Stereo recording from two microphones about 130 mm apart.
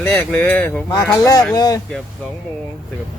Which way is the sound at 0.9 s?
25° left (ahead or behind).